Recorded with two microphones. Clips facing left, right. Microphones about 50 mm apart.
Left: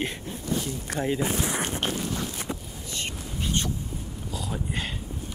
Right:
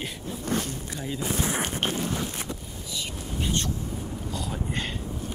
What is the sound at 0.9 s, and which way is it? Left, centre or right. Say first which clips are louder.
Speech: left 7 dB; left.